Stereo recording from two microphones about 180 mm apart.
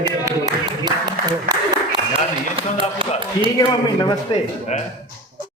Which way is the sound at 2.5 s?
30° right (ahead or behind).